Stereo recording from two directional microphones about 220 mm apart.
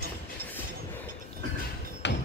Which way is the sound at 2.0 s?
50° left (ahead or behind).